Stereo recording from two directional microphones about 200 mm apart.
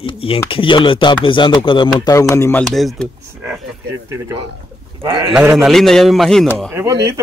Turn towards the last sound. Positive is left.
turn(degrees=-15)  # may be behind; listen again after turning